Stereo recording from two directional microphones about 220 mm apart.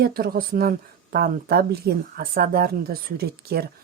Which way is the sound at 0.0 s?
45° right (ahead or behind).